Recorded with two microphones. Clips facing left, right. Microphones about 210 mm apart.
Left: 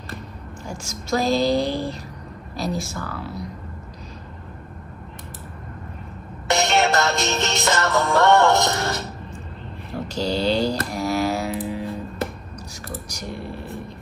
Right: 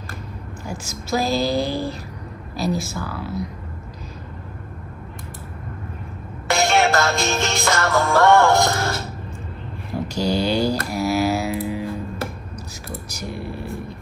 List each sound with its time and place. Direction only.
0.7 s speech: 5° right (ahead or behind)
6.4 s music: 20° left (ahead or behind)
10.0 s music: 10° right (ahead or behind)
12.9 s speech: 5° right (ahead or behind)